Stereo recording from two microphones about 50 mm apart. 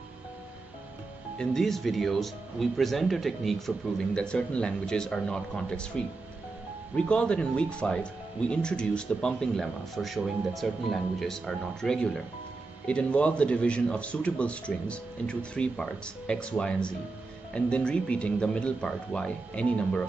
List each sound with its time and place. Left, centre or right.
1.4 s speech: centre
4.1 s speech: centre
9.6 s speech: centre
12.8 s speech: left